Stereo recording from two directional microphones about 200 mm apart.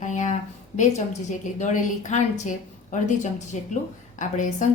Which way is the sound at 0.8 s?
35° left (ahead or behind).